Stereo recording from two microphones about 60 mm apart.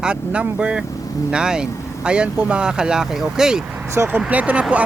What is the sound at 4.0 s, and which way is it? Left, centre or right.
Speech, right.